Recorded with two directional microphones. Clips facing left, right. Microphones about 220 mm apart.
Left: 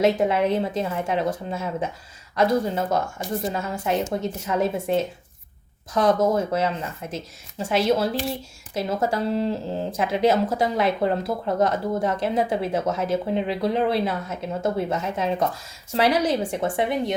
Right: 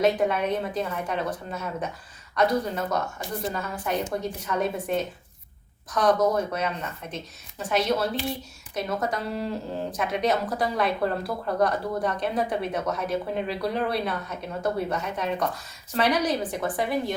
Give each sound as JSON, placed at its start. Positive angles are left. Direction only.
{"t": 0.0, "sound": "speech", "side_deg": 25}